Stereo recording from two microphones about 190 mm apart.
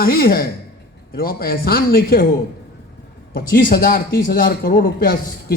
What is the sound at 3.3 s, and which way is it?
Speech, 50° left (ahead or behind).